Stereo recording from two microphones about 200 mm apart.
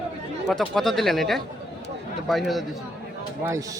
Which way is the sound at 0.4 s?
5° left (ahead or behind).